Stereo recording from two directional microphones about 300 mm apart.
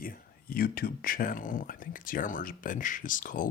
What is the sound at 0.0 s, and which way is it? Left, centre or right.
Speech, left.